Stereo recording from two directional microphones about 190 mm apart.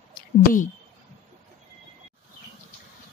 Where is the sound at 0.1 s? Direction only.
45° left (ahead or behind).